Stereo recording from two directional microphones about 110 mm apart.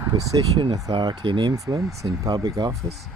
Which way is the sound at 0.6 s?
45° right (ahead or behind).